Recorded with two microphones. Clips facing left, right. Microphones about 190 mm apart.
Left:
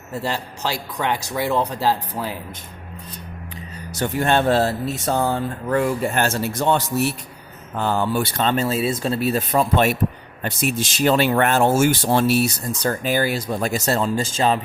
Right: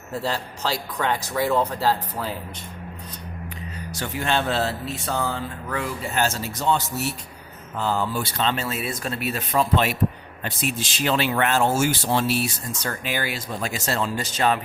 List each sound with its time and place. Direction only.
0.9 s speech: 15° left (ahead or behind)
4.0 s speech: 50° left (ahead or behind)
12.8 s speech: 40° left (ahead or behind)
14.2 s speech: 30° left (ahead or behind)